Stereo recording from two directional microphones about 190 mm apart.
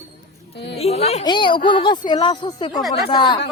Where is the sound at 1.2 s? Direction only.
25° left (ahead or behind).